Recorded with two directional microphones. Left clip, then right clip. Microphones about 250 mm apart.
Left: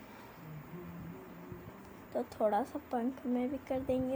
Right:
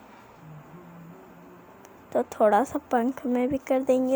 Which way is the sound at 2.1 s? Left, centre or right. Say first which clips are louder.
Right 11 dB; right.